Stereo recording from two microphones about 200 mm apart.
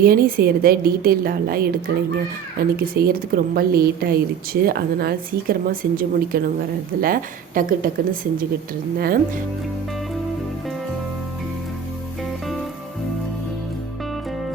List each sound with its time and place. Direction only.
0.0 s a woman's voice: 45° right (ahead or behind)
12.2 s music: centre (ahead or behind)